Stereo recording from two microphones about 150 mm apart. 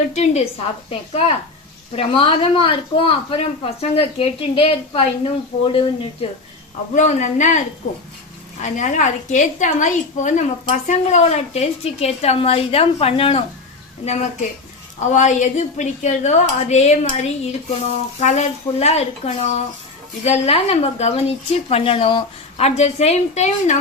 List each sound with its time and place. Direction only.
0.1 s a woman's voice: 50° left (ahead or behind)
6.9 s a man's voice: 55° left (ahead or behind)
8.6 s a woman's voice: 55° left (ahead or behind)
15.1 s a woman's voice: 55° left (ahead or behind)